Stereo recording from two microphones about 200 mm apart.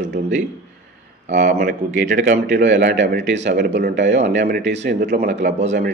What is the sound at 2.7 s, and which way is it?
Speech, 55° right (ahead or behind).